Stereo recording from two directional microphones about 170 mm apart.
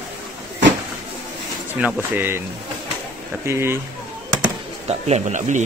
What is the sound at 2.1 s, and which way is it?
Speech, 15° right (ahead or behind).